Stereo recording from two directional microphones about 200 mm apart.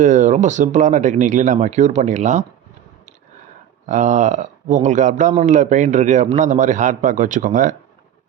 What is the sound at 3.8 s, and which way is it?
Speech, 40° right (ahead or behind).